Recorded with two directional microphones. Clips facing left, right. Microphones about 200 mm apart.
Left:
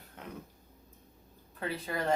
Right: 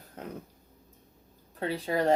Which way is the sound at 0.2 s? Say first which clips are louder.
Right 6 dB; 40° right (ahead or behind).